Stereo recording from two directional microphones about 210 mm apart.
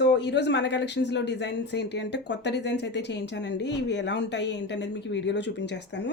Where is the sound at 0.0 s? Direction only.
55° left (ahead or behind).